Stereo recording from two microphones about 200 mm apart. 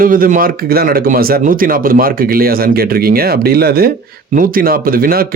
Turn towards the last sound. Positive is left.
turn(degrees=-50)  # may be behind; listen again after turning